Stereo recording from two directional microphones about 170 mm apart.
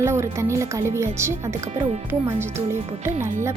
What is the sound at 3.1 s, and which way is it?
Speech, 45° right (ahead or behind).